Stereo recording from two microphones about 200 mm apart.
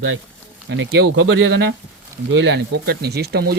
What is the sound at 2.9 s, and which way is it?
Speech, 55° right (ahead or behind).